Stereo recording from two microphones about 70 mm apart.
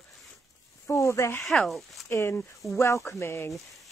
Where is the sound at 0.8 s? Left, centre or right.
Left.